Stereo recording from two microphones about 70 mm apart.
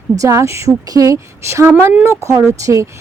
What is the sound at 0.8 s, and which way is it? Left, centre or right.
Speech, right.